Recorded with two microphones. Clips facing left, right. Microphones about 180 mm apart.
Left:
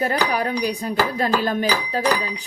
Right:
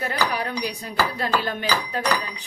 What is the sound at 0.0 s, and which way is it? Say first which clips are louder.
Dishes: left 4 dB; 45° left (ahead or behind).